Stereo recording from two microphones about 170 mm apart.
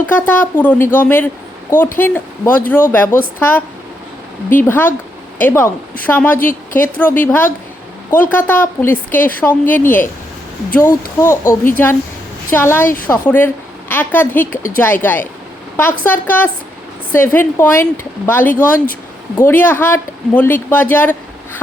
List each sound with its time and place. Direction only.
0.0 s a woman's voice: 10° left (ahead or behind)
4.6 s a woman's voice: 10° left (ahead or behind)